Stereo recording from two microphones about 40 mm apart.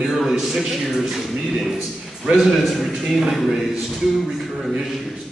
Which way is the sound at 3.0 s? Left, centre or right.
Centre.